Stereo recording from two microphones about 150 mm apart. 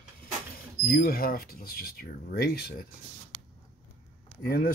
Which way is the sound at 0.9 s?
80° left.